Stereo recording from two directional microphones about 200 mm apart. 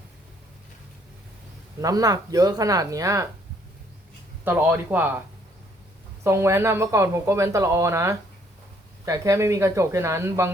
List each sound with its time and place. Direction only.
1.8 s speech: 20° right (ahead or behind)
4.4 s speech: 10° right (ahead or behind)
6.2 s speech: 15° right (ahead or behind)